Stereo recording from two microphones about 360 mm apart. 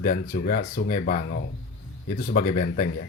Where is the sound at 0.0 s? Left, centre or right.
Left.